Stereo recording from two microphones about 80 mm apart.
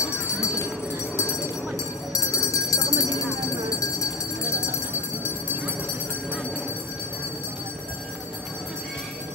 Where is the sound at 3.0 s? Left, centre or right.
Left.